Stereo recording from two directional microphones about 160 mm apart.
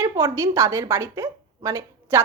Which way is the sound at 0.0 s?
20° right (ahead or behind).